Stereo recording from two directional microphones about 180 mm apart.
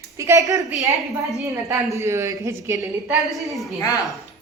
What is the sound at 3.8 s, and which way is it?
Speech, 20° left (ahead or behind).